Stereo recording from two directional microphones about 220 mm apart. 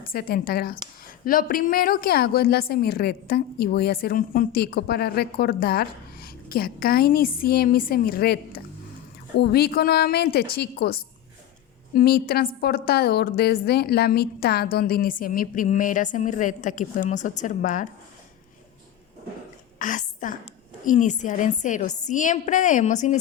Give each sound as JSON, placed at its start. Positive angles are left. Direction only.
{"t": 0.0, "sound": "a woman's voice", "side_deg": 40}
{"t": 19.8, "sound": "a sound", "side_deg": 35}
{"t": 20.8, "sound": "a woman's voice", "side_deg": 35}